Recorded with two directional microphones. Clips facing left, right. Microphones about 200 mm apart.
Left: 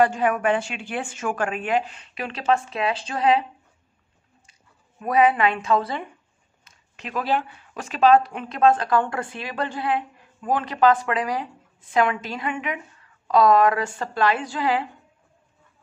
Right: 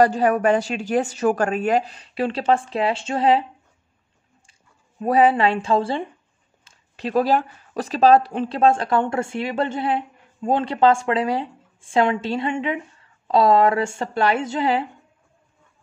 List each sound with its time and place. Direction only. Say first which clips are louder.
0.0 s a woman's voice: right 3 dB; 35° right (ahead or behind)
4.5 s speech: even; 30° right (ahead or behind)